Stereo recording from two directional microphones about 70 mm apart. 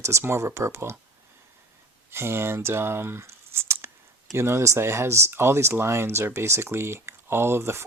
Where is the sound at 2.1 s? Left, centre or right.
Right.